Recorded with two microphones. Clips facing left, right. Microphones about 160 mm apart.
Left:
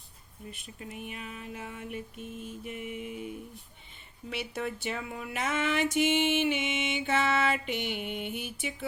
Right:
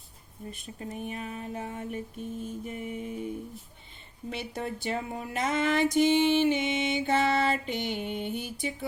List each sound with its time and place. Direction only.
0.5 s speech: 40° right (ahead or behind)
4.3 s speech: 40° right (ahead or behind)